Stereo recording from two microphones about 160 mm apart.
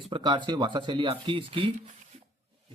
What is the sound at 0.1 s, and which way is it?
Speech, 30° right (ahead or behind).